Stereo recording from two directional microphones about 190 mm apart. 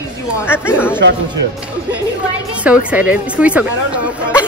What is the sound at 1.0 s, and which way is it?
Speech, 65° right (ahead or behind).